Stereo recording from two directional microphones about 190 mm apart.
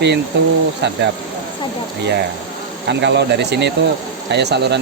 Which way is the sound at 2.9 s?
65° right (ahead or behind).